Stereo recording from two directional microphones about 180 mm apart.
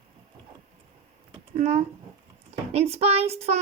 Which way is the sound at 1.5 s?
35° right (ahead or behind).